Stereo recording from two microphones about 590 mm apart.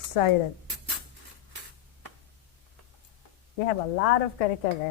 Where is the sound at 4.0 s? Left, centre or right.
Left.